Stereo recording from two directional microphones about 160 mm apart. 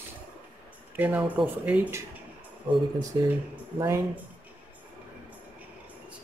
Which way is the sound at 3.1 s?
25° right (ahead or behind).